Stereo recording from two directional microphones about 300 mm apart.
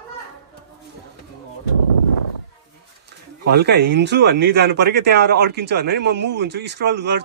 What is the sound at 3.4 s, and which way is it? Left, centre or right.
Speech, right.